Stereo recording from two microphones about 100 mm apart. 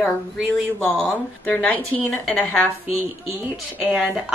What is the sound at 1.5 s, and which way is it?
Speech, 15° left (ahead or behind).